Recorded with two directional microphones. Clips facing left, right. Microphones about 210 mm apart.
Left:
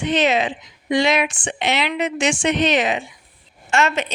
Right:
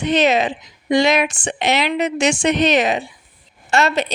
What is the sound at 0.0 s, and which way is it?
Speech, 40° right (ahead or behind).